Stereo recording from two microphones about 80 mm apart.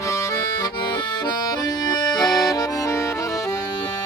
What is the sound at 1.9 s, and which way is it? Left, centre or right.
Accordion, left.